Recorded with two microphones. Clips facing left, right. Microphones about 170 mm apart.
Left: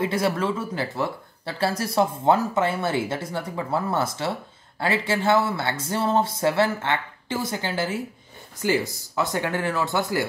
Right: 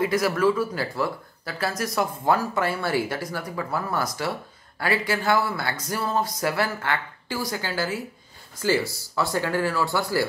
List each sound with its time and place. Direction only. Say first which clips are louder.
0.0 s speech: right 2 dB; 25° left (ahead or behind)